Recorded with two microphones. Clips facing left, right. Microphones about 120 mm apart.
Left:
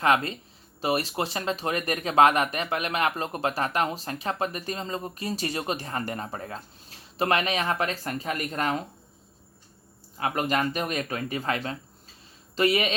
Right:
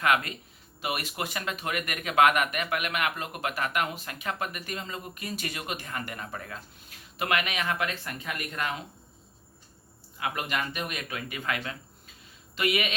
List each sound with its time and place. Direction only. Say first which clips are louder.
0.0 s speech: left 3 dB; 30° left (ahead or behind)
10.2 s speech: left 5 dB; 40° left (ahead or behind)